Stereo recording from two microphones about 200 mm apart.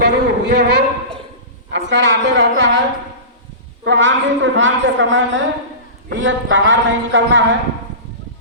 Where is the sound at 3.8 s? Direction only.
65° right (ahead or behind).